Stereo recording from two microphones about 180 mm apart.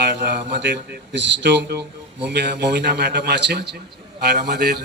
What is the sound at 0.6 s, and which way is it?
A man's voice, 70° right (ahead or behind).